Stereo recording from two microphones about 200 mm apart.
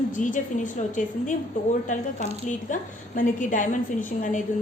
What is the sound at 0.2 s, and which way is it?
A woman's voice, 40° left (ahead or behind).